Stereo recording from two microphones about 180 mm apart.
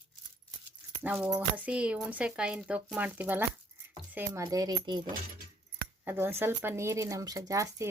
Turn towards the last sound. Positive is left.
turn(degrees=-15)  # may be behind; listen again after turning